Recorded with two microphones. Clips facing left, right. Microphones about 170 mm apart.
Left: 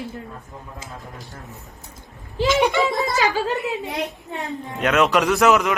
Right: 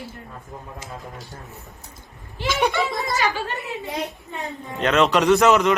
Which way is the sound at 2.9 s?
90° left.